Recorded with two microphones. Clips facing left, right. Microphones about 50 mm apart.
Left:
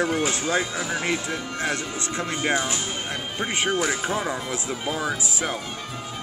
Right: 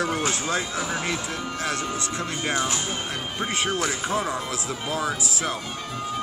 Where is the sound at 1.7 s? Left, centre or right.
Left.